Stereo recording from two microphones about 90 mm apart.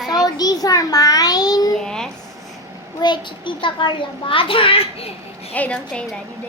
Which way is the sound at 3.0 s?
60° left (ahead or behind).